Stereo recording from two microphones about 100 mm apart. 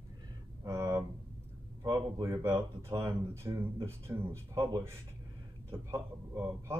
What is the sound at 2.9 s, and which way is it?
Speech, 30° right (ahead or behind).